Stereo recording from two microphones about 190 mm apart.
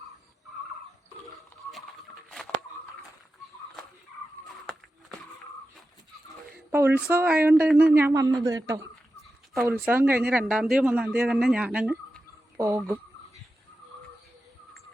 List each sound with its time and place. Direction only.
6.7 s speech: 10° right (ahead or behind)
12.5 s speech: 15° right (ahead or behind)